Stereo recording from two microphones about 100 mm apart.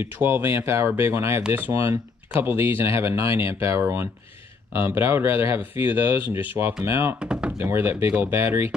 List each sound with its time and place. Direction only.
0.0 s speech: 25° right (ahead or behind)
7.2 s speech: 10° right (ahead or behind)
7.5 s speech: 25° right (ahead or behind)